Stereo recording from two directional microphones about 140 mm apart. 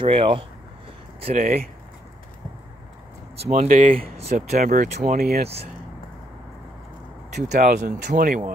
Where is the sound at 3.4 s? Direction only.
50° right (ahead or behind); by 5.4 s 90° right.